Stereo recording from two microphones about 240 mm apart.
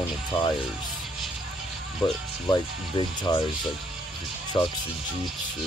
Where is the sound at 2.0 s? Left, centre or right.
Centre.